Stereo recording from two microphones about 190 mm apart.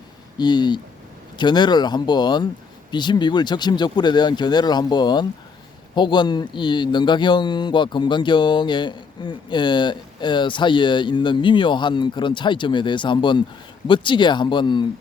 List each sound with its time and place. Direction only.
0.3 s a man's voice: 25° left (ahead or behind)